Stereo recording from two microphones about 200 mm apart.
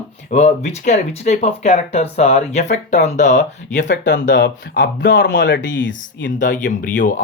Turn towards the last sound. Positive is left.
turn(degrees=40)  # may be behind; listen again after turning